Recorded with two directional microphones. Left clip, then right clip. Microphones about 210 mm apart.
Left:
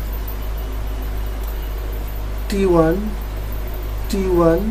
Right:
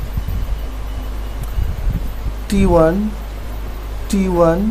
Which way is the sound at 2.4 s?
35° right (ahead or behind).